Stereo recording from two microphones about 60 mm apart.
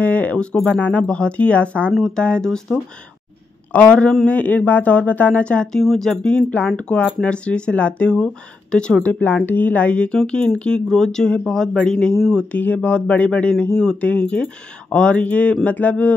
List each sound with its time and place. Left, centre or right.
0.0 s speech: left
3.7 s speech: left
6.3 s speech: left
9.0 s speech: left; by 12.4 s centre
12.4 s speech: left